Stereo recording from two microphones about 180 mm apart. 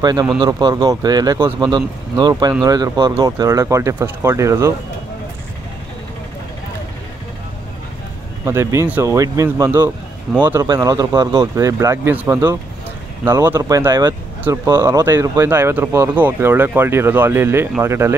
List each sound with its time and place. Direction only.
0.0 s speech: 20° right (ahead or behind)
8.5 s speech: 15° right (ahead or behind)